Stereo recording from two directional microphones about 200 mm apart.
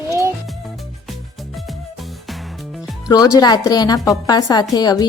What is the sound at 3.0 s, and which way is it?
A woman's voice, 20° left (ahead or behind).